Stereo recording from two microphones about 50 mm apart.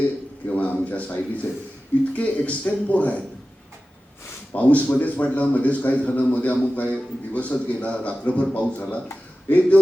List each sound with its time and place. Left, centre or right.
0.4 s a man's voice: left
4.5 s a man's voice: left